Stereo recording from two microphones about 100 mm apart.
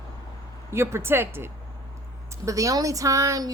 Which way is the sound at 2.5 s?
35° right (ahead or behind).